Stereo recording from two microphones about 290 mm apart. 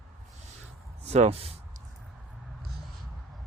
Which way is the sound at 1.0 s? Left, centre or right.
Right.